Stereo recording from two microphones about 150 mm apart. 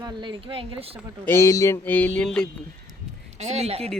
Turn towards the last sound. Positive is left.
turn(degrees=-45)  # may be behind; listen again after turning